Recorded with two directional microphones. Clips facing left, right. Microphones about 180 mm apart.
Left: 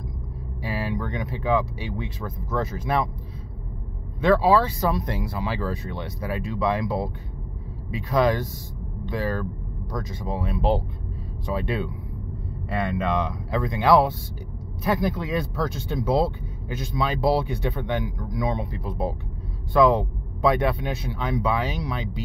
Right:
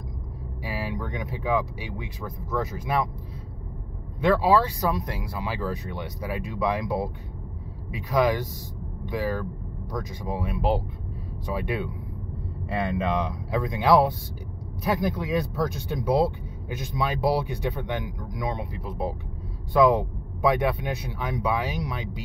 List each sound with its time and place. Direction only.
0.7 s speech: 10° right (ahead or behind)
4.2 s speech: 10° right (ahead or behind)